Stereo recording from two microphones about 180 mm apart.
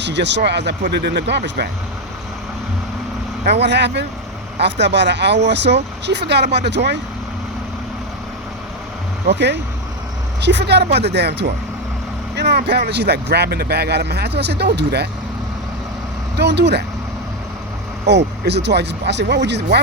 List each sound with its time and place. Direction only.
0.0 s speech: 75° right (ahead or behind)
3.4 s speech: 70° right (ahead or behind)
9.3 s speech: 70° right (ahead or behind)
16.4 s speech: 70° right (ahead or behind)
18.0 s speech: 70° right (ahead or behind)